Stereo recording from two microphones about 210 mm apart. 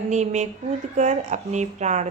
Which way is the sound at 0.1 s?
35° right (ahead or behind).